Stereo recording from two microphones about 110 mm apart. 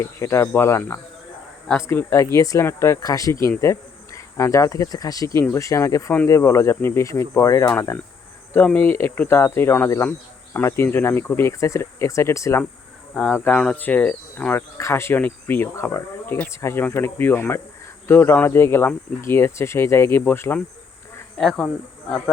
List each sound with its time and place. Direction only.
0.0 s speech: 25° left (ahead or behind)
13.3 s speech: 15° left (ahead or behind)
14.8 s speech: 25° left (ahead or behind)
21.3 s speech: 10° left (ahead or behind)